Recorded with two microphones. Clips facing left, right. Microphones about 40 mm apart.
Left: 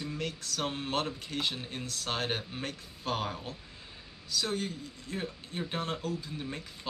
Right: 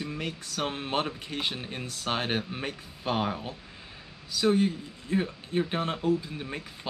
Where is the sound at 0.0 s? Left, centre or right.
Right.